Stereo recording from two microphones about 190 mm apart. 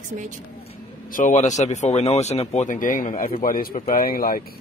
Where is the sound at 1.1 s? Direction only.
40° left (ahead or behind).